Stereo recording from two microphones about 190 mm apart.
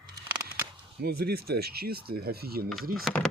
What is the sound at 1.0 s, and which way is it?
Speech, 55° right (ahead or behind).